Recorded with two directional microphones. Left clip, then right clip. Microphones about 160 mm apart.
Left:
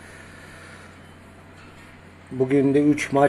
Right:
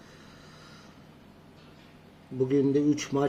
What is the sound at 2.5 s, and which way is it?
Speech, 20° right (ahead or behind).